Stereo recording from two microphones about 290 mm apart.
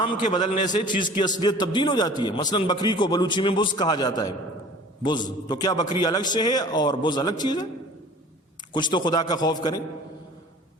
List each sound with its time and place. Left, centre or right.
0.0 s a man's voice: centre
5.5 s a man's voice: centre
8.7 s a man's voice: centre